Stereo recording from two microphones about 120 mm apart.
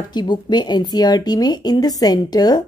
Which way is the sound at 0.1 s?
40° left (ahead or behind).